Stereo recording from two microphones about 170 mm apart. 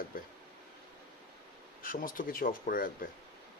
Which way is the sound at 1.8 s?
55° left (ahead or behind).